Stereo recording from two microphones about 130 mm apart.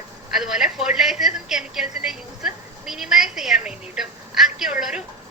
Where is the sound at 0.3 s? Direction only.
5° right (ahead or behind).